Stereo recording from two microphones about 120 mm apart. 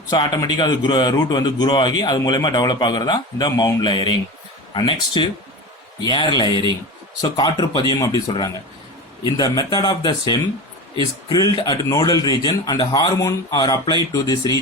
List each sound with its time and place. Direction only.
0.1 s a man's voice: 35° left (ahead or behind)